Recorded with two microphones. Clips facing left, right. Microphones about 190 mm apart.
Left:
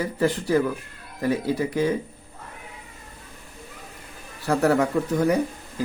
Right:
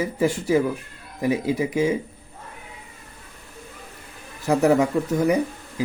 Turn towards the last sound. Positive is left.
turn(degrees=-10)  # may be behind; listen again after turning